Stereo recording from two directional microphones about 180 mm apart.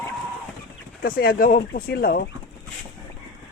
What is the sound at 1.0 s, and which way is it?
Speech, 55° left (ahead or behind).